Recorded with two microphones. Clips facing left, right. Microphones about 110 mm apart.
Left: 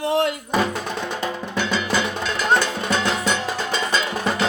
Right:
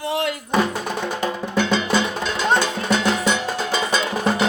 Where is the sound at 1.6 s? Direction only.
25° right (ahead or behind).